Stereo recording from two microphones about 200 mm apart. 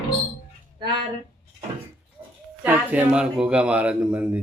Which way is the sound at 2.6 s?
5° right (ahead or behind).